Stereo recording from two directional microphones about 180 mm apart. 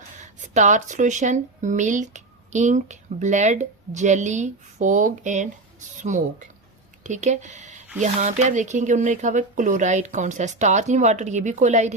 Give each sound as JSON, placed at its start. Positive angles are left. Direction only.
{"t": 0.2, "sound": "speech", "side_deg": -40}